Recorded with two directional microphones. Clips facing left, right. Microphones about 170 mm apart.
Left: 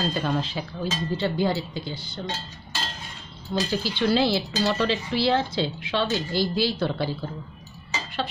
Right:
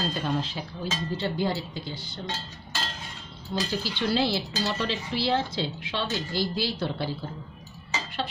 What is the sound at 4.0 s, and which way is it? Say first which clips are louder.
Speech: left 4 dB; 90° left.